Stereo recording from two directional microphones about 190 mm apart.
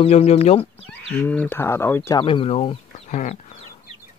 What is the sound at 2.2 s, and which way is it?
Speech, 30° left (ahead or behind).